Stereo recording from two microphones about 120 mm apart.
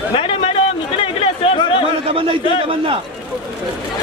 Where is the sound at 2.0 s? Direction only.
55° right (ahead or behind).